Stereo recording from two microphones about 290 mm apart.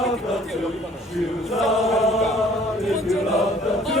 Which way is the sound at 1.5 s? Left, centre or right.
Centre.